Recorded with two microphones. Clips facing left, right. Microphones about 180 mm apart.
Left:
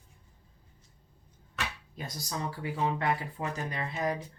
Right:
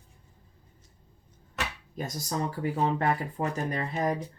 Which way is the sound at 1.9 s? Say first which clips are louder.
Right 5 dB; 45° right (ahead or behind).